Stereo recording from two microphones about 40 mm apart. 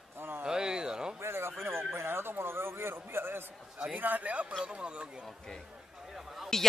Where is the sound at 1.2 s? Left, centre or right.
Right.